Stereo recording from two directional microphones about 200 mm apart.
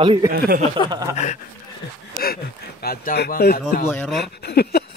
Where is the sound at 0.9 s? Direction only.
20° right (ahead or behind).